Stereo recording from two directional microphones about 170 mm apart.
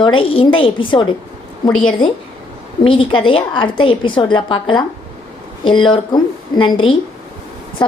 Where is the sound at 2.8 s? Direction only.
30° left (ahead or behind).